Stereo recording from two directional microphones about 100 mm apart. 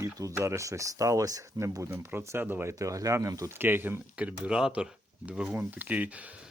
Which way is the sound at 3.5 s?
20° right (ahead or behind).